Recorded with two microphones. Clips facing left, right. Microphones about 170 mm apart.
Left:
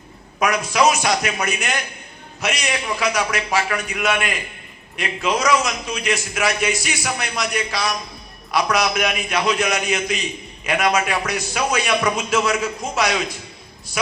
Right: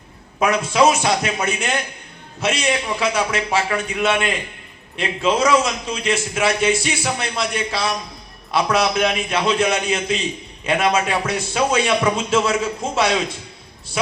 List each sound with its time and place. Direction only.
0.3 s a man's voice: 25° right (ahead or behind)